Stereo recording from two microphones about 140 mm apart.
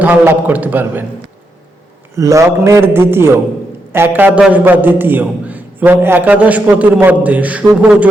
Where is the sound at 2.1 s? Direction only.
20° right (ahead or behind).